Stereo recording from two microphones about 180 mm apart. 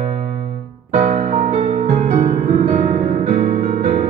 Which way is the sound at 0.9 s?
40° right (ahead or behind).